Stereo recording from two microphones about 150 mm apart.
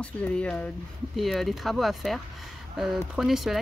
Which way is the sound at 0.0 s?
10° left (ahead or behind).